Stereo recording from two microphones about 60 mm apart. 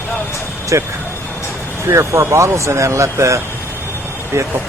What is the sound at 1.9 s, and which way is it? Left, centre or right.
Speech, right.